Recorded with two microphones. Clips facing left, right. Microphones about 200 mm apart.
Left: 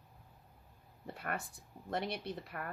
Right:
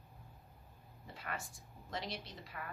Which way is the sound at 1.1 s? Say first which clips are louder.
Left 4 dB; 55° left (ahead or behind).